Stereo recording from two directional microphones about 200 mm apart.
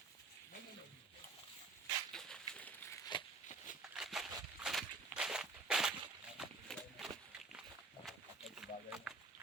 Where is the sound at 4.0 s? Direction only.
Centre (ahead or behind).